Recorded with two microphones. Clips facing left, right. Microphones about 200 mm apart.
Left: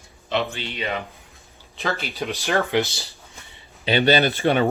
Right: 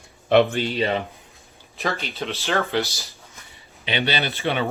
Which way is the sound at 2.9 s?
30° left (ahead or behind).